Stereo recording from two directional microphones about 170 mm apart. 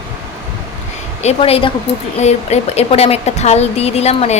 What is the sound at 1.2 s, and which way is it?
A woman's voice, 40° left (ahead or behind).